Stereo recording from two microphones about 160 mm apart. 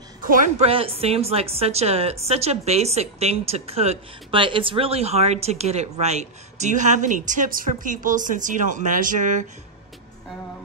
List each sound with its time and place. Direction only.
0.2 s a woman's voice: 60° right (ahead or behind)
0.6 s a woman's voice: 35° right (ahead or behind); by 9.4 s 55° right (ahead or behind)